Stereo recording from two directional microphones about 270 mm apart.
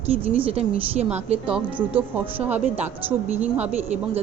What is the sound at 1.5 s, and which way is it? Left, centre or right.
Speech, centre.